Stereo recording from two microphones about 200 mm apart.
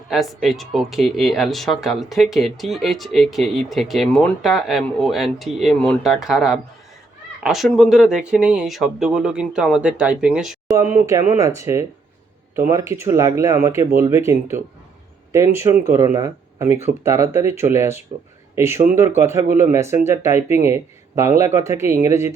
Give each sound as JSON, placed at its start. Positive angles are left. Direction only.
{"t": 0.1, "sound": "speech", "side_deg": 0}
{"t": 11.0, "sound": "speech", "side_deg": -15}